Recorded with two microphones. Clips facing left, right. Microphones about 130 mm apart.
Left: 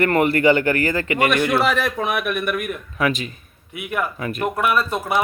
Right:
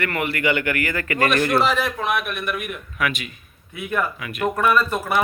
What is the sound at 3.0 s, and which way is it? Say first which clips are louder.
Speech: left 4 dB; 35° left (ahead or behind).